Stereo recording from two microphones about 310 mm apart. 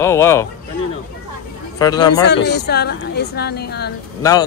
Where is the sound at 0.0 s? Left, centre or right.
Centre.